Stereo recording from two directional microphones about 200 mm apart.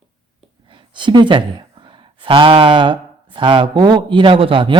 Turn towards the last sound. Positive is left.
turn(degrees=-25)  # may be behind; listen again after turning